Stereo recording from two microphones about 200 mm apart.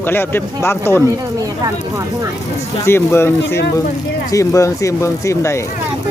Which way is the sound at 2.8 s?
10° left (ahead or behind).